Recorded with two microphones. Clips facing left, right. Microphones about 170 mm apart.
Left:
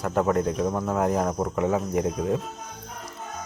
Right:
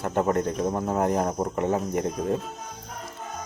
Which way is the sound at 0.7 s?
25° right (ahead or behind).